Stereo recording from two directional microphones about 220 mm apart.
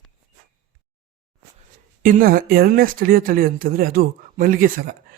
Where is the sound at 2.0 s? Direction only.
40° right (ahead or behind).